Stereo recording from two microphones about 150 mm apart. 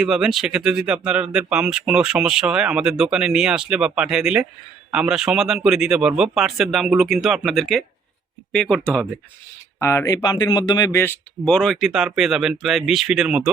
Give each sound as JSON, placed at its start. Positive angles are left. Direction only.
{"t": 0.0, "sound": "speech", "side_deg": 0}
{"t": 9.8, "sound": "speech", "side_deg": 20}
{"t": 10.9, "sound": "speech", "side_deg": 15}